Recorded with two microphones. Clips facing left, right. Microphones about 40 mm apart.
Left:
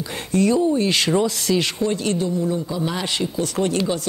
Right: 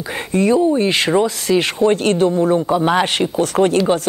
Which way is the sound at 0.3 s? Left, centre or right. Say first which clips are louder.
Right 4 dB; right.